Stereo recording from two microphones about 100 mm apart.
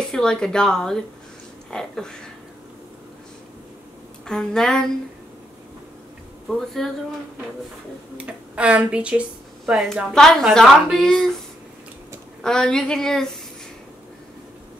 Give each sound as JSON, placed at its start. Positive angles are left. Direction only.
{"t": 0.1, "sound": "a woman's voice", "side_deg": 5}
{"t": 4.3, "sound": "speech", "side_deg": 5}
{"t": 6.5, "sound": "a woman's voice", "side_deg": 5}
{"t": 8.3, "sound": "a woman's voice", "side_deg": -10}
{"t": 12.4, "sound": "a woman's voice", "side_deg": 5}